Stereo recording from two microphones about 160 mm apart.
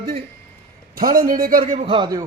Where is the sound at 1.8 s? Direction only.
30° right (ahead or behind).